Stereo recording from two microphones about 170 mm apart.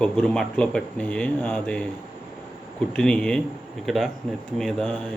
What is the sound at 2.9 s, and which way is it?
Speech, 5° left (ahead or behind).